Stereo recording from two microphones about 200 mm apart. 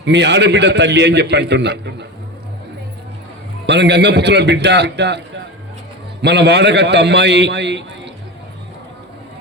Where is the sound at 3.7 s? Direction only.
60° right (ahead or behind).